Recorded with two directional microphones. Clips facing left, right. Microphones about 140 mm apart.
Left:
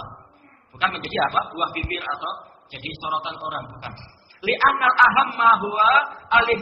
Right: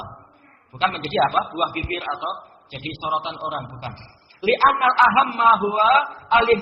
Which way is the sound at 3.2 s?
25° right (ahead or behind).